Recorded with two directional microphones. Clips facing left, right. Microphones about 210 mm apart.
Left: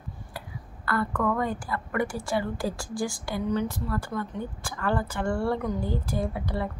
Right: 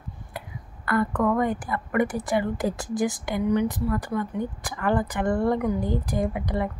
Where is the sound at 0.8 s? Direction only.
20° right (ahead or behind).